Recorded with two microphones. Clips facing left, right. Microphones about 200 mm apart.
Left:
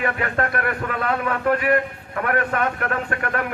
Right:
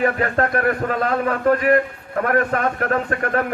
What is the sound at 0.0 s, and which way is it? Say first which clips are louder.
A man's voice: right 4 dB; 40° right (ahead or behind).